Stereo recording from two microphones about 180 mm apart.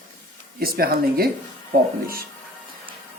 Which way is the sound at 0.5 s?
55° right (ahead or behind).